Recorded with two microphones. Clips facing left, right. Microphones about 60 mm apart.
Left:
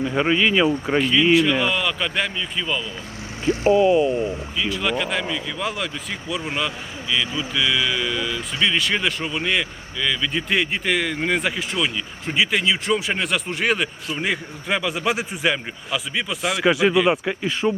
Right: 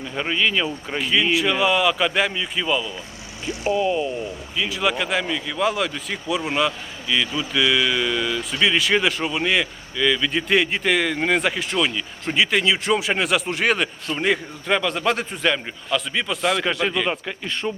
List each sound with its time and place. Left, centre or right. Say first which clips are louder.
0.0 s speech: left 4 dB; centre
1.0 s speech: left 2 dB; centre
3.4 s speech: left 6 dB; left
3.8 s speech: left 4 dB; centre
4.5 s speech: right 3 dB; centre